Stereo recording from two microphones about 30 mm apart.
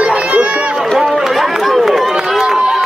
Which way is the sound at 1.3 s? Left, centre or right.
Centre.